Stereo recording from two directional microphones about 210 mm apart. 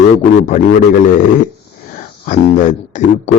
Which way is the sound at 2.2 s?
35° left (ahead or behind).